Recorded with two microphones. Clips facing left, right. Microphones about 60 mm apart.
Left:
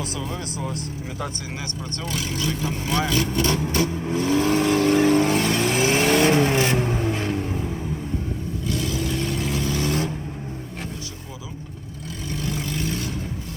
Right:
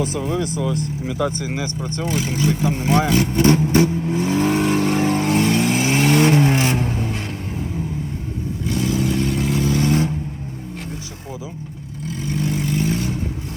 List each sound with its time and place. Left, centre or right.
0.2 s speech: right
2.0 s speech: centre
3.1 s speech: right
4.2 s vehicle: centre
5.0 s vehicle: centre
7.1 s vehicle: centre
8.6 s vehicle: centre
12.4 s vehicle: right